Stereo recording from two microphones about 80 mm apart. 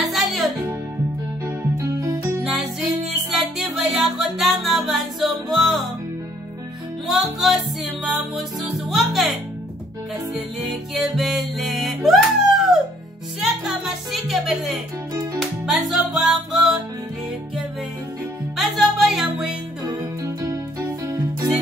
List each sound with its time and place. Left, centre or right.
0.0 s music: centre
1.6 s music: right
2.4 s music: centre
7.1 s music: centre
10.7 s music: centre
18.6 s music: centre